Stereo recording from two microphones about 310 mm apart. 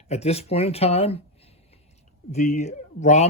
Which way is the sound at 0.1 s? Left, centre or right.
Centre.